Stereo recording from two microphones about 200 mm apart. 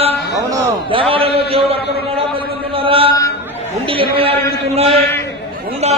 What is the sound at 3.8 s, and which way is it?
Speech, 25° right (ahead or behind).